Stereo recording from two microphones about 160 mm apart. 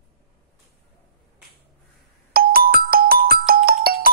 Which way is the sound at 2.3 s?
65° right (ahead or behind).